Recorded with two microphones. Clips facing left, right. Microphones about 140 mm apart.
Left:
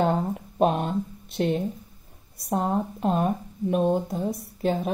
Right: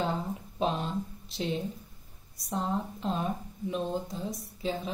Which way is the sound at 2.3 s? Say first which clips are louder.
Left 7 dB; 60° left (ahead or behind).